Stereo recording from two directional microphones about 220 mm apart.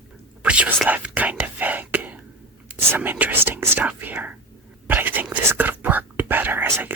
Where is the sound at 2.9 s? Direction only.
10° right (ahead or behind).